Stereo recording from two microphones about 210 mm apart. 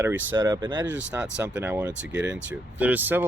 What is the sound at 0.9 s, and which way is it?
Speech, 5° right (ahead or behind).